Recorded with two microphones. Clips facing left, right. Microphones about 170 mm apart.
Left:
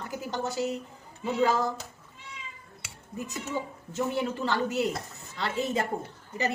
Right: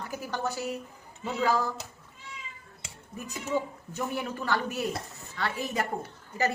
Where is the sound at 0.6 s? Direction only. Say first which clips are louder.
Left 4 dB; 25° left (ahead or behind).